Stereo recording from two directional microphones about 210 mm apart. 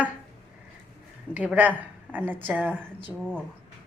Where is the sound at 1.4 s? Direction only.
5° right (ahead or behind).